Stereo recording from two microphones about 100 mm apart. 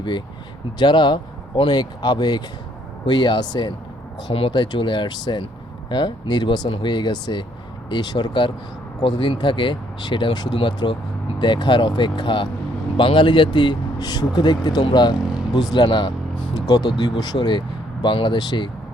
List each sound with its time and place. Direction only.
0.8 s speech: 50° left (ahead or behind)
4.3 s speech: 60° left (ahead or behind)
16.6 s speech: 40° left (ahead or behind)